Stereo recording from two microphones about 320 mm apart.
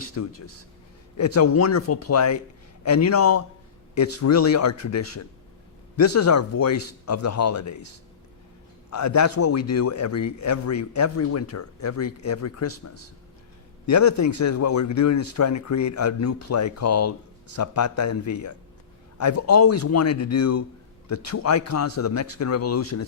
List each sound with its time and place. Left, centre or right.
0.0 s a man's voice: left
3.9 s a man's voice: left
8.9 s a man's voice: left
12.7 s a man's voice: left
13.8 s a man's voice: left